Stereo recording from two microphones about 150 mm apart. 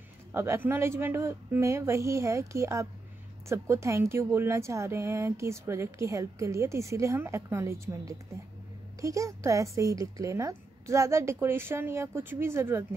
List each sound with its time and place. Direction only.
0.3 s speech: 15° right (ahead or behind)